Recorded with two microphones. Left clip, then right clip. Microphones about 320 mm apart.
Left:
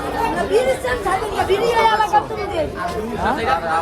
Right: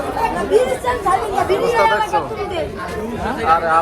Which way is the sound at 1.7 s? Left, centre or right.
Left.